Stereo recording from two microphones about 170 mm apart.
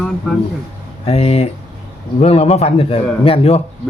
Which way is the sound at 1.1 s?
35° left (ahead or behind).